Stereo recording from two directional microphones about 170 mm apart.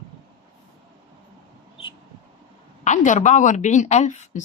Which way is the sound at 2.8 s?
45° left (ahead or behind).